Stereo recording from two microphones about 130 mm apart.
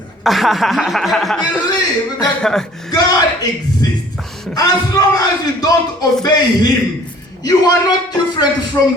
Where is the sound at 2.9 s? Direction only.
30° left (ahead or behind).